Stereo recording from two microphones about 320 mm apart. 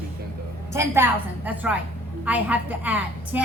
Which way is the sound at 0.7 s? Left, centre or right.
Centre.